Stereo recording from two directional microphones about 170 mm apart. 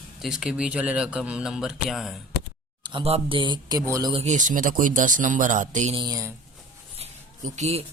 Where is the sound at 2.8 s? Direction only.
30° right (ahead or behind).